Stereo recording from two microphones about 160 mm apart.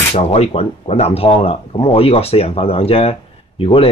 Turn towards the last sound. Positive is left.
turn(degrees=35)  # may be behind; listen again after turning